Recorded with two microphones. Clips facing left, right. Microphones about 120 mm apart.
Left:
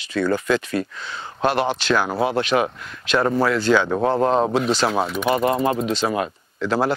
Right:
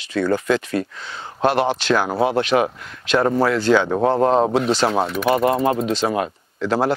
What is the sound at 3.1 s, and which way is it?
Speech, 30° right (ahead or behind).